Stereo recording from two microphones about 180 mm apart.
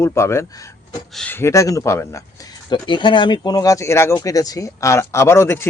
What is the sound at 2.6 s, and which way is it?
Speech, 25° left (ahead or behind).